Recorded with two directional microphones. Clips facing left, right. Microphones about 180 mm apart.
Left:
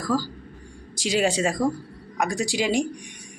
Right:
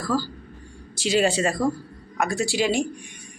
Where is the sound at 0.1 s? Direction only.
15° left (ahead or behind).